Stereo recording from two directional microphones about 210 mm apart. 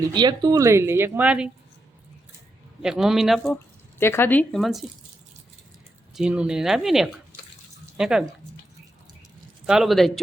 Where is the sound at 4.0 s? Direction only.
10° left (ahead or behind).